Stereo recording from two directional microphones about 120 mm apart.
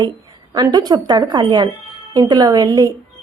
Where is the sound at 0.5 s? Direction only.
35° right (ahead or behind).